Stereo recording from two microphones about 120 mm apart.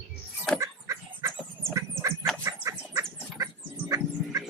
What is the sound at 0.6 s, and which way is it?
Chicken, 25° right (ahead or behind).